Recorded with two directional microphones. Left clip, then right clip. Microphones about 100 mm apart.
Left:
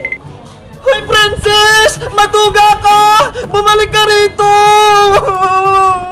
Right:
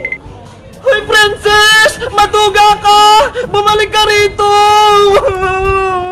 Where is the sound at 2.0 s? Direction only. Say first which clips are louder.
Even; 30° right (ahead or behind).